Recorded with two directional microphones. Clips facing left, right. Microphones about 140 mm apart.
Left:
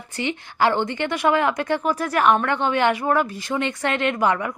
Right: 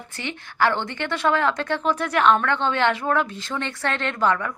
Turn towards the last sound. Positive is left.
turn(degrees=15)  # may be behind; listen again after turning